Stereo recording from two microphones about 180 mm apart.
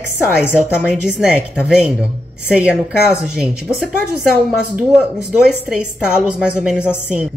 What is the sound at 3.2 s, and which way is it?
Speech, 5° right (ahead or behind).